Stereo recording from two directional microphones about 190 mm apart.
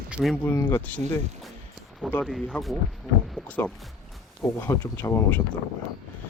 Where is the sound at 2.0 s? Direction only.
Centre (ahead or behind).